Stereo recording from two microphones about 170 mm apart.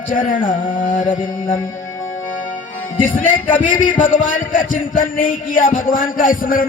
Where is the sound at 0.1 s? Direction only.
55° left (ahead or behind).